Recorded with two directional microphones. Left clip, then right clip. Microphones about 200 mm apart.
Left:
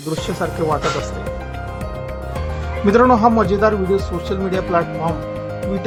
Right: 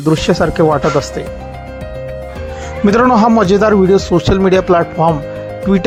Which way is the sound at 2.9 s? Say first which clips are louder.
Right 3 dB; 40° right (ahead or behind).